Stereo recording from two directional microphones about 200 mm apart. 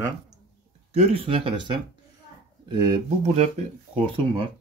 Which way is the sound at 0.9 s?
30° right (ahead or behind).